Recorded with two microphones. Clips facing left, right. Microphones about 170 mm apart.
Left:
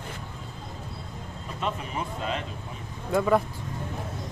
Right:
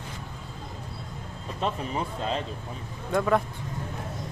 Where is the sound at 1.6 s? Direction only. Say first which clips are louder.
Right 1 dB; 35° right (ahead or behind).